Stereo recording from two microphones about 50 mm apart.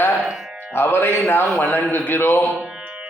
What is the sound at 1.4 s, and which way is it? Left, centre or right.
Speech, centre.